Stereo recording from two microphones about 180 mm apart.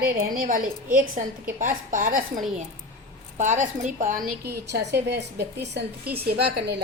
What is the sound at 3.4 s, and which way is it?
A woman's voice, 40° right (ahead or behind).